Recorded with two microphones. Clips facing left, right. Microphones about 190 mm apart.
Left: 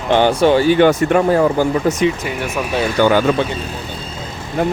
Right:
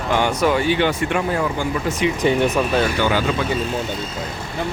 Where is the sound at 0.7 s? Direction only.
45° left (ahead or behind).